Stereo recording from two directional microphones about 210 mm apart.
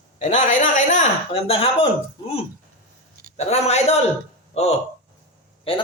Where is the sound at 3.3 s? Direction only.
30° left (ahead or behind).